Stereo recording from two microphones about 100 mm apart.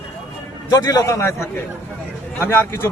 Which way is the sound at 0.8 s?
30° left (ahead or behind).